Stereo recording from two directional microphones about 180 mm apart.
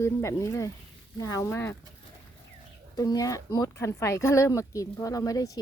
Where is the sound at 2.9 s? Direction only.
20° left (ahead or behind).